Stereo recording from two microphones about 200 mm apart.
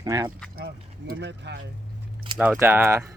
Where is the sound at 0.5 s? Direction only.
50° right (ahead or behind).